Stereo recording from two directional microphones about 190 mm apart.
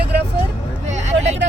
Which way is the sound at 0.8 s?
35° right (ahead or behind).